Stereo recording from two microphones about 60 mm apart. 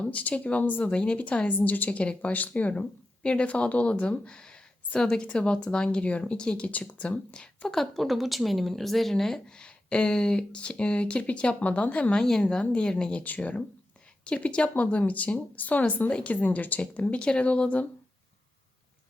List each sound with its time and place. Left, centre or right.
0.0 s speech: left